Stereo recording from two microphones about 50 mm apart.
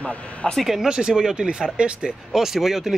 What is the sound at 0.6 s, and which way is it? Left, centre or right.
Speech, centre.